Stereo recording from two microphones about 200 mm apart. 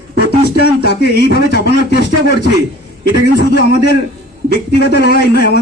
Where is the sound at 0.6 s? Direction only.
55° left (ahead or behind).